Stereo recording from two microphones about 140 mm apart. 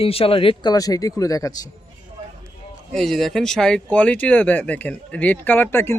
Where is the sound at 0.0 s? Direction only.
40° left (ahead or behind); by 1.5 s 25° left (ahead or behind).